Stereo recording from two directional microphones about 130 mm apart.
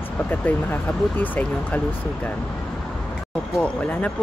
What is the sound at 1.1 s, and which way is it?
Speech, 15° left (ahead or behind).